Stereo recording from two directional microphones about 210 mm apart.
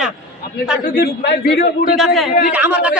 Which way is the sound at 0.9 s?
50° left (ahead or behind).